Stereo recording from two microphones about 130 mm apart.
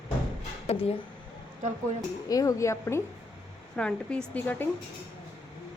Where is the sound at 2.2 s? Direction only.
25° left (ahead or behind).